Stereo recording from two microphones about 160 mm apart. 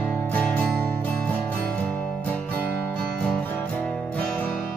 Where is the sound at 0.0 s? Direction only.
10° left (ahead or behind).